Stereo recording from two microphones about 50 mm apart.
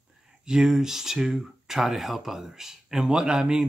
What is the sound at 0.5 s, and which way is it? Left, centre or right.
Speech, centre.